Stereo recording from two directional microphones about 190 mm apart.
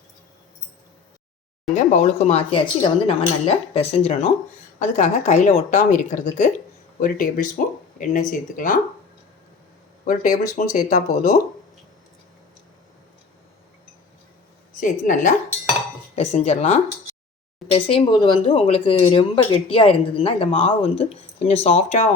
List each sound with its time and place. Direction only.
1.7 s speech: 40° left (ahead or behind)
7.0 s a woman's voice: 45° left (ahead or behind)
10.0 s speech: 45° left (ahead or behind)
14.8 s a woman's voice: 45° left (ahead or behind)